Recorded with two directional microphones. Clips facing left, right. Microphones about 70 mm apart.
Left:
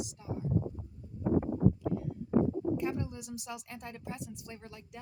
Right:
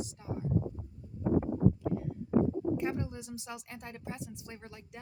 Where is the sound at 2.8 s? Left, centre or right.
Right.